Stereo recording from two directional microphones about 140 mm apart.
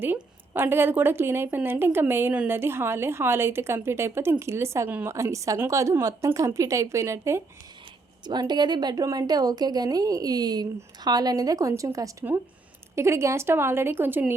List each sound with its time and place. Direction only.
0.0 s a woman's voice: 15° right (ahead or behind)
8.2 s a woman's voice: 30° right (ahead or behind); by 14.3 s 15° right (ahead or behind)